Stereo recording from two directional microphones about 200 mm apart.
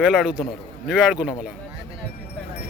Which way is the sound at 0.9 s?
5° right (ahead or behind).